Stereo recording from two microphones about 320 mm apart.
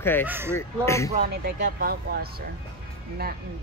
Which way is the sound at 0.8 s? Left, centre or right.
Centre.